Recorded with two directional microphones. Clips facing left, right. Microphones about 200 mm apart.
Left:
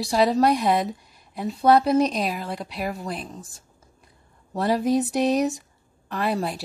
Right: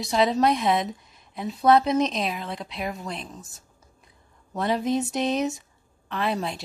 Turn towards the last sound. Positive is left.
turn(degrees=5)  # may be behind; listen again after turning